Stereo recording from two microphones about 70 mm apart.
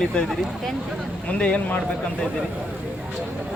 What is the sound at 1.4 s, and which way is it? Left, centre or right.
Speech, centre.